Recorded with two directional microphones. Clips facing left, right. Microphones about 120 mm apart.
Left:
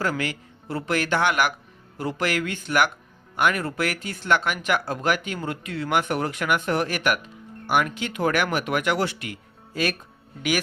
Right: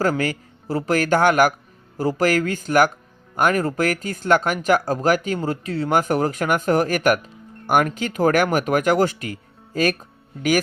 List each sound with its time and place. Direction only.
0.0 s speech: 40° right (ahead or behind)